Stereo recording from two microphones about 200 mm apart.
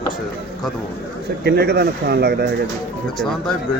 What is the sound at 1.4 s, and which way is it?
Speech, 55° right (ahead or behind).